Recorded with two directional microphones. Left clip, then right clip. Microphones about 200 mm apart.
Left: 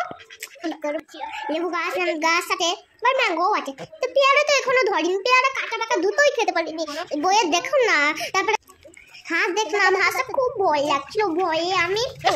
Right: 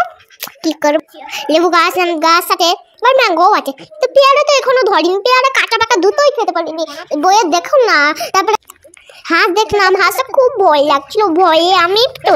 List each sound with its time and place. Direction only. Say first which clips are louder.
0.4 s a child's voice: right 14 dB; 50° right (ahead or behind); by 5.5 s 30° right (ahead or behind)
5.5 s a child's voice: right 12 dB; 50° right (ahead or behind); by 6.2 s 35° right (ahead or behind)
6.2 s a child's voice: right 8 dB; 20° right (ahead or behind); by 12.1 s 35° right (ahead or behind)